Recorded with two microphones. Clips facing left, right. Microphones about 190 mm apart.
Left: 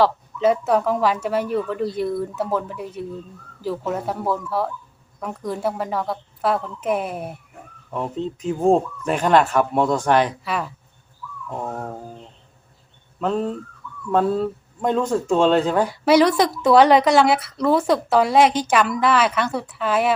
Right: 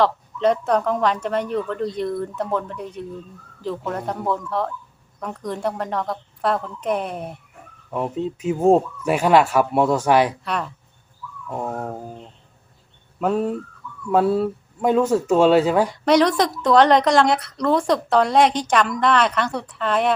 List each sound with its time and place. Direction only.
0.0 s speech: 5° left (ahead or behind)
7.9 s speech: 10° right (ahead or behind)
10.4 s speech: 5° left (ahead or behind)
11.5 s speech: 10° right (ahead or behind)
15.9 s speech: 5° left (ahead or behind)